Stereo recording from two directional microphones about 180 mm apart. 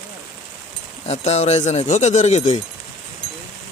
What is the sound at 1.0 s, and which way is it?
Speech, 40° left (ahead or behind).